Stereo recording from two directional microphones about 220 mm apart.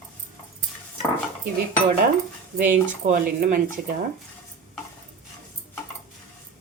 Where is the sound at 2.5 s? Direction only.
40° right (ahead or behind).